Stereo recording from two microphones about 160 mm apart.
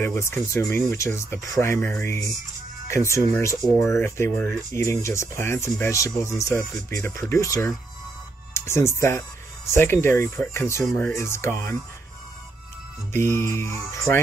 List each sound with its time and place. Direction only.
0.0 s speech: 15° left (ahead or behind)
13.1 s speech: 15° left (ahead or behind)